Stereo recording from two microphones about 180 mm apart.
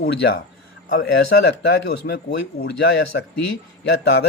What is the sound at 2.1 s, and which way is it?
Speech, 60° left (ahead or behind).